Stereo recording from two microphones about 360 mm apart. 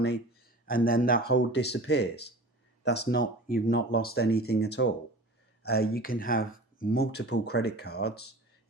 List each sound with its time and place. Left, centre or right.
0.7 s speech: left